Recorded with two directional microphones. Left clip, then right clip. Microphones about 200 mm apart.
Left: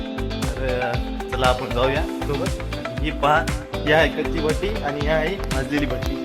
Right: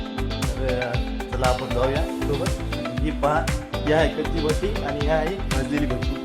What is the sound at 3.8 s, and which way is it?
Speech, 30° left (ahead or behind).